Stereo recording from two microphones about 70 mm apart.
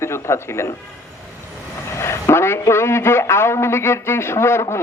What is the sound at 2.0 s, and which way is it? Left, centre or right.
A man's voice, left.